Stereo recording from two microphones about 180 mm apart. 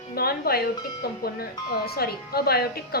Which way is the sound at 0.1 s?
60° left (ahead or behind).